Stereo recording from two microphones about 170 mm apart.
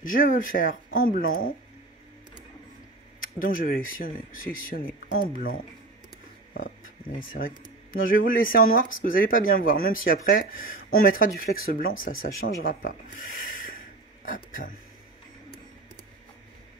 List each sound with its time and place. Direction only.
0.0 s speech: 55° left (ahead or behind)
3.2 s speech: 55° left (ahead or behind)
7.4 s speech: 50° left (ahead or behind)